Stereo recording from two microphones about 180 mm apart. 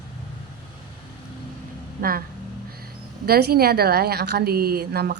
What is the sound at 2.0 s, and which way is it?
A woman's voice, 55° right (ahead or behind).